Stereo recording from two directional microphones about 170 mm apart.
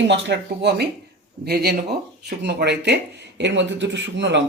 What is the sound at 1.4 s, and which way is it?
Speech, 70° right (ahead or behind).